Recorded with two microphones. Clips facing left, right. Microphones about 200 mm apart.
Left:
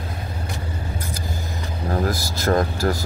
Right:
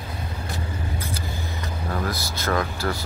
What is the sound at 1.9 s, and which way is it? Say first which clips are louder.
Speech: left 6 dB; 40° left (ahead or behind).